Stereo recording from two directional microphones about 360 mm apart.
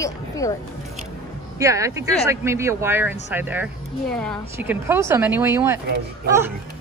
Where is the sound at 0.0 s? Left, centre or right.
Centre.